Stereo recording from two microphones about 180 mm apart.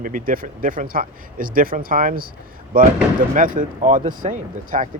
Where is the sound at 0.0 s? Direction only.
50° right (ahead or behind).